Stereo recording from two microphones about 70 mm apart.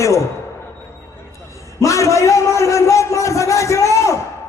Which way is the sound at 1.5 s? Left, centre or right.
Left.